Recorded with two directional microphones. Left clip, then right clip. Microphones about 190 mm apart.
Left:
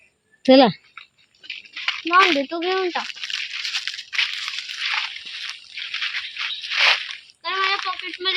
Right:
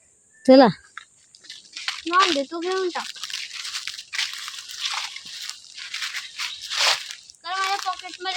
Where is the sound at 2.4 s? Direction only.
35° left (ahead or behind).